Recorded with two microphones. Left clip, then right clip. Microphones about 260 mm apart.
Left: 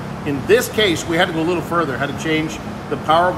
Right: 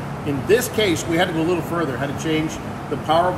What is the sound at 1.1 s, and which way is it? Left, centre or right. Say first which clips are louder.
Speech: left 2 dB; centre.